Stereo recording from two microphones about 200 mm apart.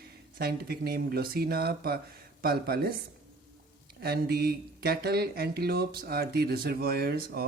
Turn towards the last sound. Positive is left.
turn(degrees=-50)  # may be behind; listen again after turning